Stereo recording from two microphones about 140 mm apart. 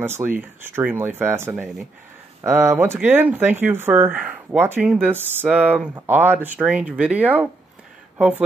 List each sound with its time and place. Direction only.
0.0 s speech: 15° right (ahead or behind)